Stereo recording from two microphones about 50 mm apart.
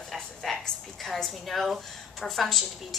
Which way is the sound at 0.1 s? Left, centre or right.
Centre.